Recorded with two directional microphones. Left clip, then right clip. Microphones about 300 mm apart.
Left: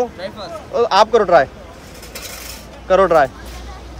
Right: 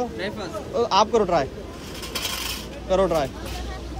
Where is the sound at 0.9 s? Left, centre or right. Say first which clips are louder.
Left 8 dB; left.